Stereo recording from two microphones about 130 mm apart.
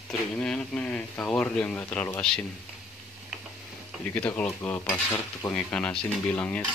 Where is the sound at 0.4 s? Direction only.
10° left (ahead or behind).